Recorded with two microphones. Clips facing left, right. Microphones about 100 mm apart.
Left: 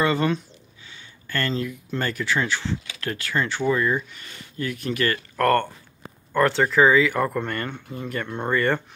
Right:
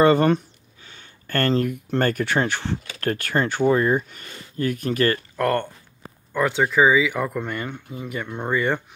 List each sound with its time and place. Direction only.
0.0 s speech: 45° right (ahead or behind)
5.4 s speech: 10° right (ahead or behind)